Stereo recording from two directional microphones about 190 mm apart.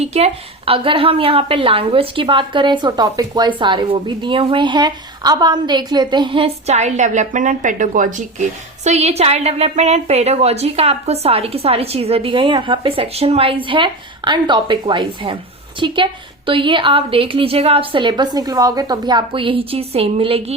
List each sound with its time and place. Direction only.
0.0 s a woman's voice: 35° right (ahead or behind)